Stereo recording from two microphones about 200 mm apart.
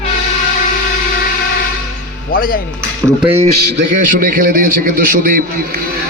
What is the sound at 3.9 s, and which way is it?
A man's voice, 45° right (ahead or behind).